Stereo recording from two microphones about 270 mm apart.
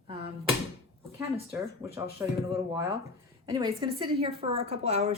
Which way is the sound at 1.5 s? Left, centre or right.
Centre.